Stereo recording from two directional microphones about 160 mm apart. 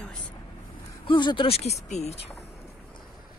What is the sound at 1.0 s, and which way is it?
Speech, 30° left (ahead or behind).